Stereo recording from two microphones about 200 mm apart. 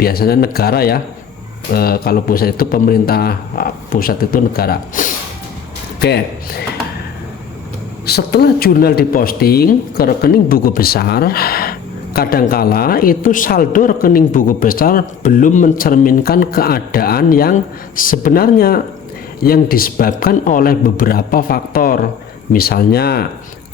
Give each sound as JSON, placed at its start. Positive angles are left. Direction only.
{"t": 0.0, "sound": "speech", "side_deg": 50}
{"t": 8.0, "sound": "speech", "side_deg": 50}